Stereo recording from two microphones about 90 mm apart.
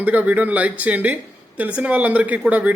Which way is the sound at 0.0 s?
15° right (ahead or behind).